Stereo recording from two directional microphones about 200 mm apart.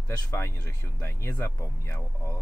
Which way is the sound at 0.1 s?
15° left (ahead or behind).